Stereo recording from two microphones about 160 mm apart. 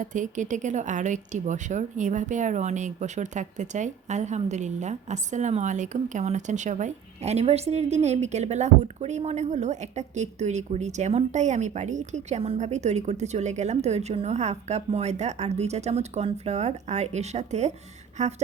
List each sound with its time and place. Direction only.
0.0 s speech: 50° right (ahead or behind)